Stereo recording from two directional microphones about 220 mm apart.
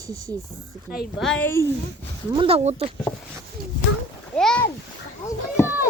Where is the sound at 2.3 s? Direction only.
25° right (ahead or behind).